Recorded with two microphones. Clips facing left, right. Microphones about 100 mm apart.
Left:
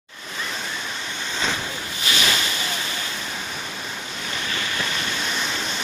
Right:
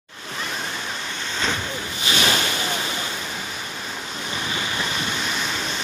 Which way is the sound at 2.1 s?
35° right (ahead or behind).